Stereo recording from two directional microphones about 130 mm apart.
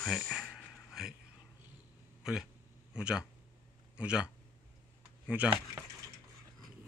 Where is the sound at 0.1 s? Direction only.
Centre (ahead or behind).